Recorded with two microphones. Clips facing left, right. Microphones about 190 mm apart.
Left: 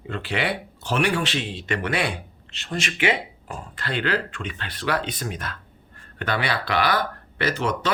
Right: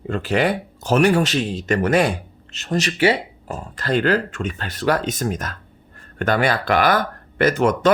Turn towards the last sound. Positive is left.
turn(degrees=-50)  # may be behind; listen again after turning